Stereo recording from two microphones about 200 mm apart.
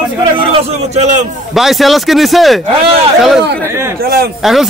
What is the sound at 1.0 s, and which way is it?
Speech, 35° right (ahead or behind).